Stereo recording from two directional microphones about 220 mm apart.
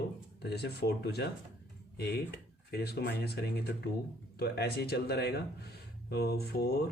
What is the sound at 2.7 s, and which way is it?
Speech, 45° left (ahead or behind).